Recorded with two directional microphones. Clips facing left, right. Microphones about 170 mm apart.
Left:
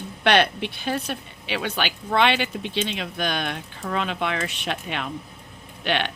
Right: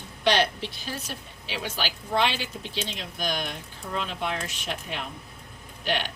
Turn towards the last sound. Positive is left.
turn(degrees=65)  # may be behind; listen again after turning